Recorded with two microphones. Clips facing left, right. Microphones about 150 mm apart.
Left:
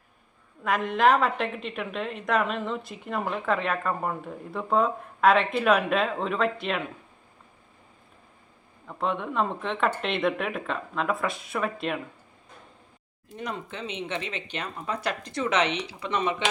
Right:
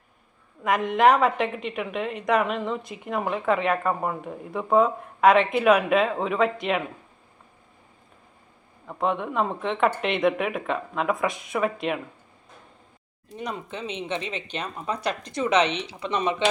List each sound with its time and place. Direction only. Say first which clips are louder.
0.6 s speech: right 3 dB; 15° right (ahead or behind)
8.9 s speech: right 3 dB; 15° right (ahead or behind)
13.3 s speech: right 2 dB; 15° right (ahead or behind)